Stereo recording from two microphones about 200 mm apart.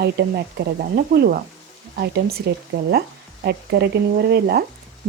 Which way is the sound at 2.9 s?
50° right (ahead or behind).